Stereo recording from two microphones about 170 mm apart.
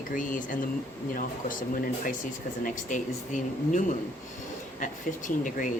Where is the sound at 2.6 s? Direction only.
50° left (ahead or behind).